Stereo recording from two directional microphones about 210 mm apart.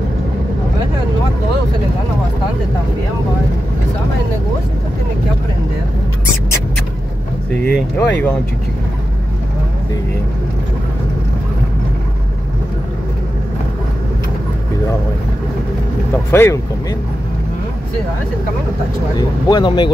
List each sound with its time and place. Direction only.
7.6 s speech: 5° left (ahead or behind)
16.3 s speech: 10° left (ahead or behind)
19.1 s speech: 20° left (ahead or behind)